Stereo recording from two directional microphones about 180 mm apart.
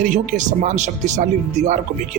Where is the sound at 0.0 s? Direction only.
45° right (ahead or behind).